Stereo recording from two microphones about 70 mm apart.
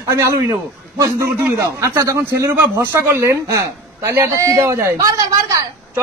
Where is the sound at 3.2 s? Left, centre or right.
Right.